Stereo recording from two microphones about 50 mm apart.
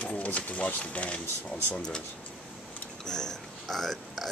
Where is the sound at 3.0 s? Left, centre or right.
Centre.